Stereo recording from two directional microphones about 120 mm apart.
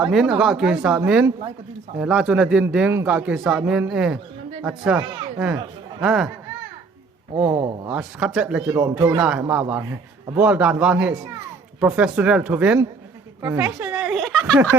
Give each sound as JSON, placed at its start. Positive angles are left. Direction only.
{"t": 0.0, "sound": "speech", "side_deg": -5}
{"t": 6.0, "sound": "speech", "side_deg": -5}
{"t": 7.5, "sound": "speech", "side_deg": -35}
{"t": 7.9, "sound": "speech", "side_deg": -10}
{"t": 8.7, "sound": "a man's voice", "side_deg": -25}
{"t": 9.2, "sound": "speech", "side_deg": -10}
{"t": 13.4, "sound": "a sound", "side_deg": -20}